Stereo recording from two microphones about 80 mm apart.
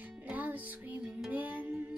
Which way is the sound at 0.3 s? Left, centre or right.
Right.